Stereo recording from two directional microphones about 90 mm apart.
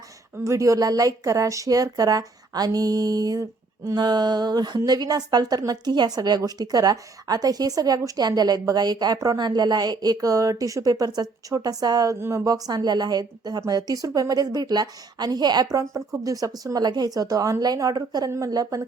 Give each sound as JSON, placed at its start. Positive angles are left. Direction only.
{"t": 0.4, "sound": "speech", "side_deg": -35}
{"t": 3.9, "sound": "a woman's voice", "side_deg": -55}
{"t": 12.2, "sound": "speech", "side_deg": -35}
{"t": 12.6, "sound": "a woman's voice", "side_deg": -50}
{"t": 15.7, "sound": "speech", "side_deg": -35}